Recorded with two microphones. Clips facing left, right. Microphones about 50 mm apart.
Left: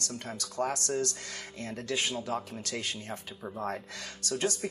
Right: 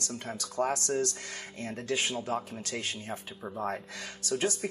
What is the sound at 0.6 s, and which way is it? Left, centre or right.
Speech, centre.